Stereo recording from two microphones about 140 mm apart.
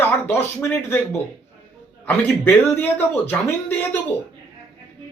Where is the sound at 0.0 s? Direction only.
15° left (ahead or behind).